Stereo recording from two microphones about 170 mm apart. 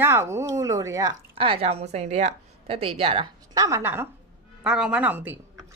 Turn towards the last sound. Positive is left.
turn(degrees=-10)  # may be behind; listen again after turning